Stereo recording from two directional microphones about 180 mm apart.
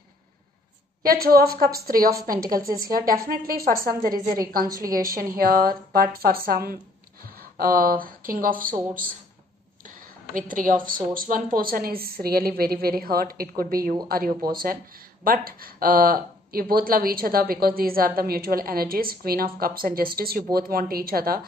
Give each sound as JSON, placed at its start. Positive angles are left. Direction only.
{"t": 1.0, "sound": "a woman's voice", "side_deg": -55}
{"t": 5.3, "sound": "speech", "side_deg": -55}
{"t": 9.8, "sound": "a sound", "side_deg": -50}
{"t": 10.9, "sound": "speech", "side_deg": -50}